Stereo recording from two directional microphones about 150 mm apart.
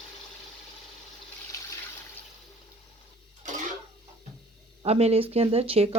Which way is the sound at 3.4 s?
55° right (ahead or behind).